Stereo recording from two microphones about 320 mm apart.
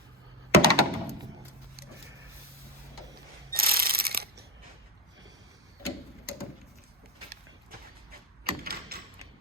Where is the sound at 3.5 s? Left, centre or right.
Right.